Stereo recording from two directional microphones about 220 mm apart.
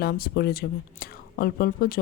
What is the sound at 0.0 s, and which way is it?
Speech, 45° left (ahead or behind).